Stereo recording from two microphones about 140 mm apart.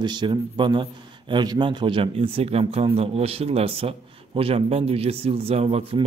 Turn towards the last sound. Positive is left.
turn(degrees=-45)  # may be behind; listen again after turning